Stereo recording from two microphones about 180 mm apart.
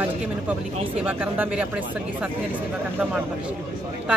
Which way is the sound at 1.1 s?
10° right (ahead or behind).